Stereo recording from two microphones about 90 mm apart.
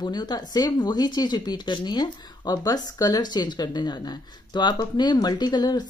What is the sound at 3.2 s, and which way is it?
Speech, 50° left (ahead or behind).